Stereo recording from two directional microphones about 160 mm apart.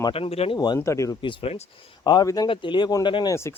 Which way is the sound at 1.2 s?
35° left (ahead or behind).